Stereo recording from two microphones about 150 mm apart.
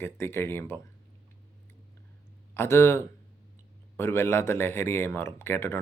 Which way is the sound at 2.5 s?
15° left (ahead or behind).